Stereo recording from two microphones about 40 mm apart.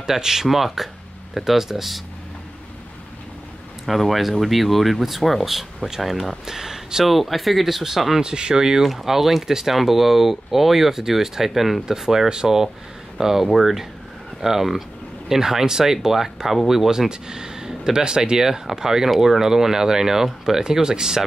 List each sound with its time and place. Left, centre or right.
0.0 s speech: centre
3.8 s speech: centre
8.2 s speech: right
8.8 s speech: centre
17.1 s speech: centre
18.4 s speech: centre